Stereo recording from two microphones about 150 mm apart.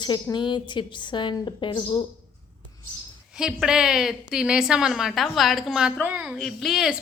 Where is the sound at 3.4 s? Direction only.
5° right (ahead or behind).